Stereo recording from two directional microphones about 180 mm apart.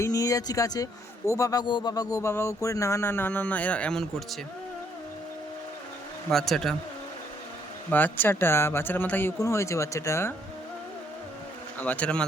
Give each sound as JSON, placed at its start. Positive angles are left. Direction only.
{"t": 0.0, "sound": "a man's voice", "side_deg": 20}
{"t": 6.3, "sound": "speech", "side_deg": 0}
{"t": 7.9, "sound": "a man's voice", "side_deg": 10}
{"t": 11.8, "sound": "a man's voice", "side_deg": 10}